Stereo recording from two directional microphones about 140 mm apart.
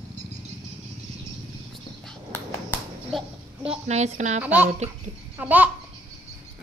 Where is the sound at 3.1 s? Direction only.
Centre (ahead or behind).